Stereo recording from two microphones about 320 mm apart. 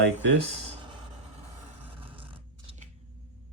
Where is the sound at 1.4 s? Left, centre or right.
Centre.